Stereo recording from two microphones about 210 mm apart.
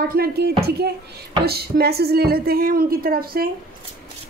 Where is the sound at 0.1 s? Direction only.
45° right (ahead or behind).